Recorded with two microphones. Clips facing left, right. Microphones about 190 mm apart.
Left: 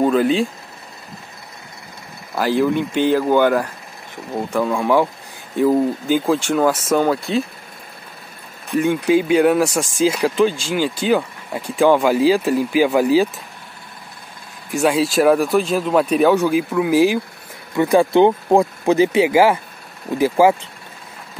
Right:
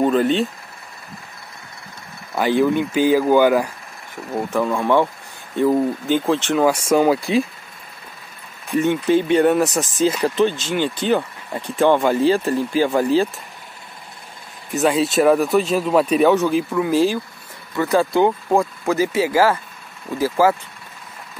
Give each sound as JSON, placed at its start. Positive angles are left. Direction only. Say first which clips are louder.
{"t": 0.0, "sound": "speech", "louder": "left 1 dB", "side_deg": 0}
{"t": 2.3, "sound": "speech", "louder": "even", "side_deg": 0}
{"t": 8.6, "sound": "speech", "louder": "left 1 dB", "side_deg": 0}
{"t": 14.7, "sound": "speech", "louder": "left 1 dB", "side_deg": 0}